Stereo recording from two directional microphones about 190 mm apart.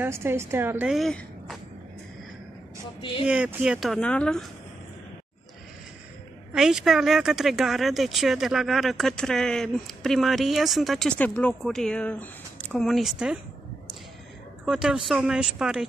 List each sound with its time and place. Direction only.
0.0 s a woman's voice: 15° right (ahead or behind)
3.0 s speech: 25° left (ahead or behind)
3.3 s speech: 5° right (ahead or behind)
6.5 s speech: centre (ahead or behind)
14.7 s speech: 5° right (ahead or behind)